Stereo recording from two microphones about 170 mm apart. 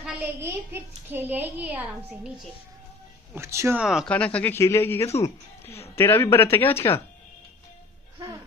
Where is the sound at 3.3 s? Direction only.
15° right (ahead or behind).